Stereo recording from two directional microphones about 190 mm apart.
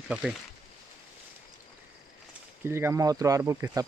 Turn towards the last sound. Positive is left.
turn(degrees=-15)  # may be behind; listen again after turning